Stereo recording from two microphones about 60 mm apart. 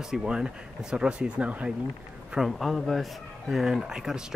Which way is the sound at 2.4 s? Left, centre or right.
Centre.